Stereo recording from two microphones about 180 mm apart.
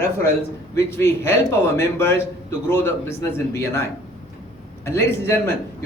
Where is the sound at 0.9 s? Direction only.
15° left (ahead or behind).